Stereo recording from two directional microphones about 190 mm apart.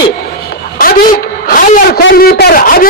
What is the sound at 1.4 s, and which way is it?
Wail, 50° left (ahead or behind).